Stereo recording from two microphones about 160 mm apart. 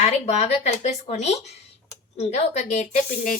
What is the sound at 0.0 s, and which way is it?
Speech, 40° left (ahead or behind).